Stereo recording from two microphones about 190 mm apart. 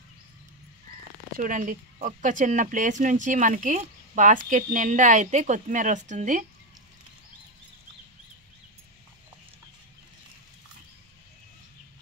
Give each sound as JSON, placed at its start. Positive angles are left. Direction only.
{"t": 1.3, "sound": "speech", "side_deg": -45}